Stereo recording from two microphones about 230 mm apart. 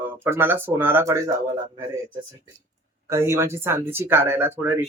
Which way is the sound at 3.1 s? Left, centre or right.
Centre.